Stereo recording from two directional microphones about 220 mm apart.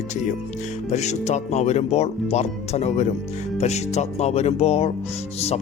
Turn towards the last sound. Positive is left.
turn(degrees=30)  # may be behind; listen again after turning